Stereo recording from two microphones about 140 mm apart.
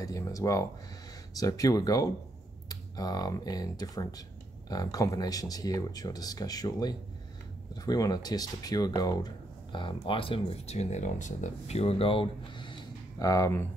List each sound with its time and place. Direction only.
0.0 s speech: 25° left (ahead or behind)
13.2 s speech: 20° left (ahead or behind)